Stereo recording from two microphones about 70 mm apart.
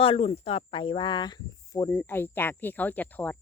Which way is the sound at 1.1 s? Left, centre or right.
Left.